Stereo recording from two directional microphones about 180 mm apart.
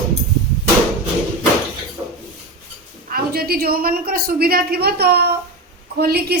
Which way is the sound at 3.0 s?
55° right (ahead or behind).